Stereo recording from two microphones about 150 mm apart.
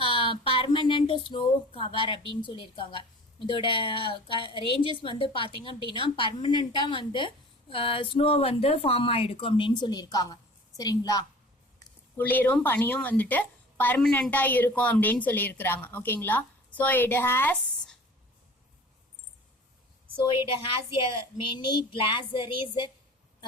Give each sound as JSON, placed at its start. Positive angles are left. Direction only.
{"t": 0.0, "sound": "a sound", "side_deg": 35}
{"t": 2.4, "sound": "a woman's voice", "side_deg": 35}
{"t": 11.8, "sound": "speech", "side_deg": 15}
{"t": 20.7, "sound": "a woman's voice", "side_deg": 35}